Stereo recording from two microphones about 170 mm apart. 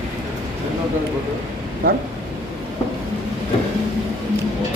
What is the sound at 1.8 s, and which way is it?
Speech, 60° right (ahead or behind).